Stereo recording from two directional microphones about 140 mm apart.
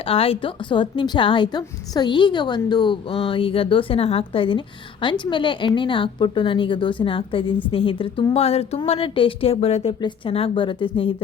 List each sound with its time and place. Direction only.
0.0 s a woman's voice: 40° left (ahead or behind)